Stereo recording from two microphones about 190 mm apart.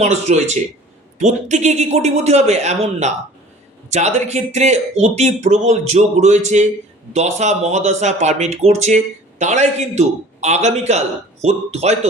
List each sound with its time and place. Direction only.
0.0 s speech: 35° right (ahead or behind)